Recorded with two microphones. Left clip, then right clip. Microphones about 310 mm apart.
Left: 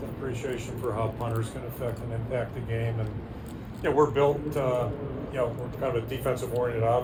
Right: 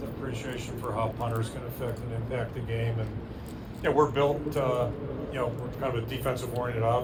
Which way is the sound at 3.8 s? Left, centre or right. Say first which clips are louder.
Left 1 dB; right.